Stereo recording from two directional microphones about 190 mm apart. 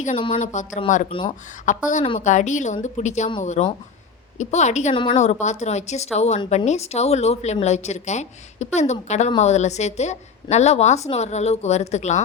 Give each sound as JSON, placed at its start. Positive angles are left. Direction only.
{"t": 0.3, "sound": "a woman's voice", "side_deg": 40}
{"t": 1.2, "sound": "speech", "side_deg": 30}
{"t": 1.6, "sound": "a woman's voice", "side_deg": 40}